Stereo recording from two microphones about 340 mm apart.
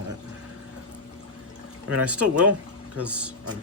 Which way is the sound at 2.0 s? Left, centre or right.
Centre.